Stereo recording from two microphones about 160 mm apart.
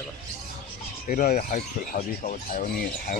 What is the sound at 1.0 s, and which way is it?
Speech, 60° left (ahead or behind).